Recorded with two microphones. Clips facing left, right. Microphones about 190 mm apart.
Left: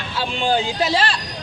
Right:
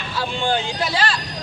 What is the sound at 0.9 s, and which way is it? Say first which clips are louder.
Speech: left 2 dB; 25° left (ahead or behind).